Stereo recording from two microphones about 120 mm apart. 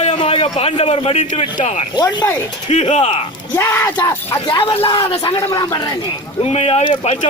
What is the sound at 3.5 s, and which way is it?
Speech, 25° left (ahead or behind).